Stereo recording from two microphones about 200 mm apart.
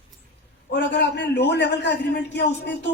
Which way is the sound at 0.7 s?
60° left (ahead or behind).